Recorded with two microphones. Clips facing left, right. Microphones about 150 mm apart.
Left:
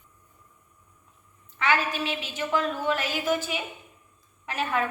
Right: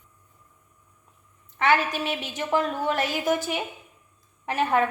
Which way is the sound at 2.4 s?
45° right (ahead or behind).